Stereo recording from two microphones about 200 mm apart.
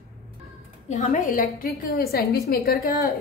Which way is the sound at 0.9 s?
40° left (ahead or behind).